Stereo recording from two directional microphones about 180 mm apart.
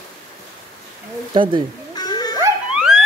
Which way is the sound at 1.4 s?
25° right (ahead or behind).